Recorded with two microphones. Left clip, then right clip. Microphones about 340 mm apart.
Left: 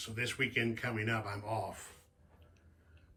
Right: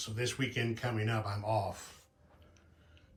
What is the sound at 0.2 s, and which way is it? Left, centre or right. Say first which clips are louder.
Speech: left 2 dB; centre.